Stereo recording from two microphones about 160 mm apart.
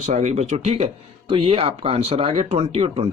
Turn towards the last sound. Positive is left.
turn(degrees=-40)  # may be behind; listen again after turning